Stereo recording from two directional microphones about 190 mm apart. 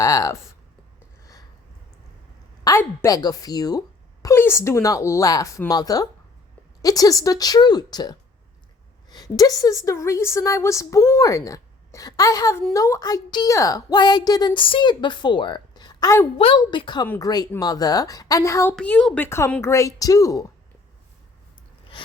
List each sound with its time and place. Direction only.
0.0 s speech: 20° left (ahead or behind)
2.6 s a woman's voice: 15° left (ahead or behind)
18.8 s a woman's voice: 5° left (ahead or behind)